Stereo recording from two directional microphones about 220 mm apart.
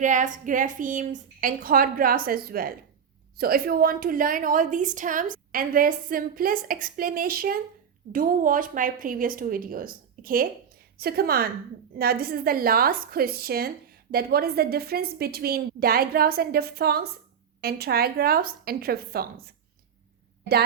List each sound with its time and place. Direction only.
0.0 s a woman's voice: 35° right (ahead or behind)